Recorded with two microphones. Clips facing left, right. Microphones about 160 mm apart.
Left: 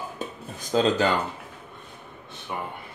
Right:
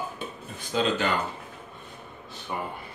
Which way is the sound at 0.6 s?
40° left (ahead or behind).